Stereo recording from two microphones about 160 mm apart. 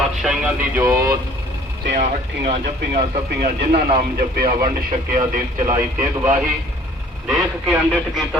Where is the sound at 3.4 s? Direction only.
65° right (ahead or behind).